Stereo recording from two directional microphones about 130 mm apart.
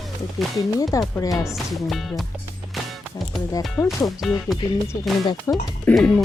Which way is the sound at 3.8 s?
Centre (ahead or behind).